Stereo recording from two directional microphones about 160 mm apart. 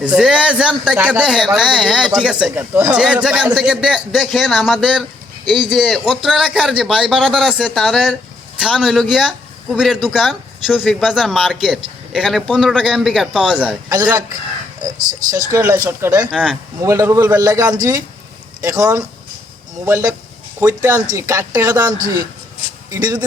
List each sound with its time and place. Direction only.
0.0 s speech: 5° right (ahead or behind)
13.9 s speech: 25° right (ahead or behind)
15.3 s speech: 20° right (ahead or behind)
16.3 s speech: 5° right (ahead or behind)
16.8 s speech: 20° right (ahead or behind)